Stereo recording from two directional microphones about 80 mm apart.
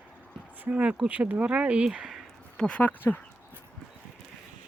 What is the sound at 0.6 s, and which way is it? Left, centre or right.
Speech, centre.